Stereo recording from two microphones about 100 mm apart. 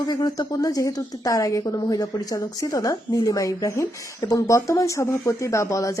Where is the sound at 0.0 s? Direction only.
45° left (ahead or behind).